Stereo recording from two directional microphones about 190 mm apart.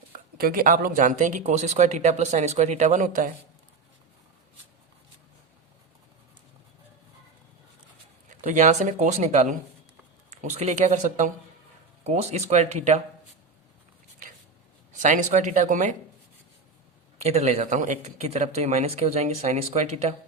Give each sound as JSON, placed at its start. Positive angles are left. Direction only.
{"t": 0.3, "sound": "speech", "side_deg": -50}
{"t": 8.3, "sound": "speech", "side_deg": -40}
{"t": 14.9, "sound": "speech", "side_deg": -40}
{"t": 17.2, "sound": "speech", "side_deg": -35}